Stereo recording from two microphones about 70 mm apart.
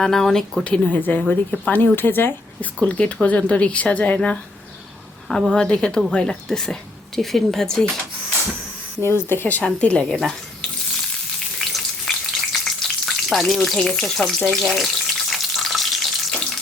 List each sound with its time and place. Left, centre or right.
0.0 s speech: centre; by 2.6 s left
2.8 s a woman's voice: centre
9.0 s speech: left
9.6 s a woman's voice: centre
11.6 s frying: centre